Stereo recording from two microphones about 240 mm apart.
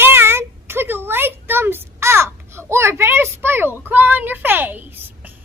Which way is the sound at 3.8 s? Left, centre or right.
Centre.